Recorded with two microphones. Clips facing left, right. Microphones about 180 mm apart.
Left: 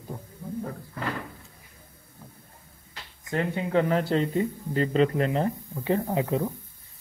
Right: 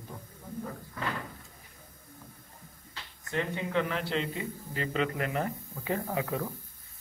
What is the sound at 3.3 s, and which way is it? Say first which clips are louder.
Speech: left 5 dB; 40° left (ahead or behind).